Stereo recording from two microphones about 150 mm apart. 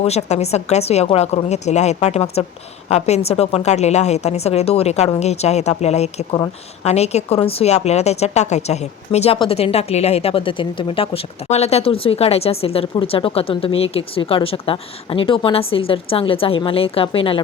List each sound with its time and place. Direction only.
0.0 s a woman's voice: 45° left (ahead or behind)